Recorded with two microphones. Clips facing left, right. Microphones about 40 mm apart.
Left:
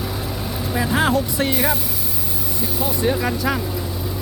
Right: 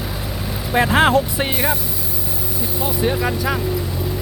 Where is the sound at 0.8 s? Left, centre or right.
Right.